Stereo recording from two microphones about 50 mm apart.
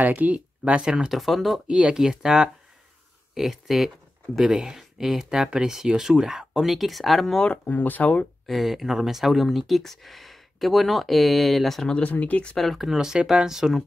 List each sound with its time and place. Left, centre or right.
0.0 s speech: right
0.8 s speech: centre
1.7 s speech: centre
7.6 s speech: left
8.5 s speech: centre
12.0 s speech: left
12.5 s speech: centre
12.9 s speech: centre